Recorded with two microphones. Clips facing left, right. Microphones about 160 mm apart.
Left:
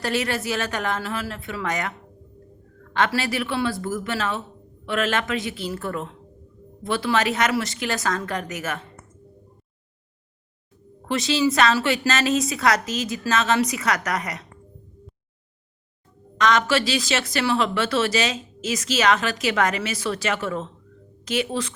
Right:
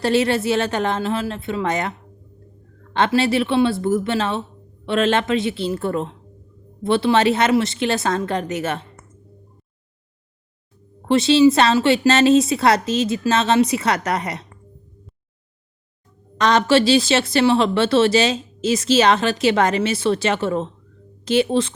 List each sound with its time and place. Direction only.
0.0 s speech: 30° right (ahead or behind)
11.1 s speech: 30° right (ahead or behind)
16.4 s speech: 30° right (ahead or behind)